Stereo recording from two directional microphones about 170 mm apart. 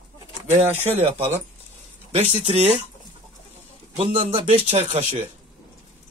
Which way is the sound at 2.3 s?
40° right (ahead or behind).